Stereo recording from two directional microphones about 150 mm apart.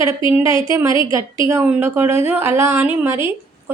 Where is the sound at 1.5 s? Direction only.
10° right (ahead or behind).